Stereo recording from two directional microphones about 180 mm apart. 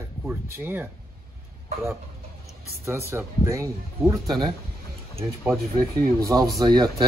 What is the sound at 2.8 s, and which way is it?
A man's voice, 15° right (ahead or behind).